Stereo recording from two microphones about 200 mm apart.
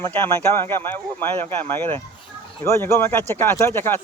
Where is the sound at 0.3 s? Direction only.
10° left (ahead or behind).